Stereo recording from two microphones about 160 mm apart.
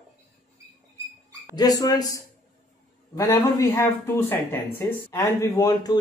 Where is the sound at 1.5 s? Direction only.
25° left (ahead or behind).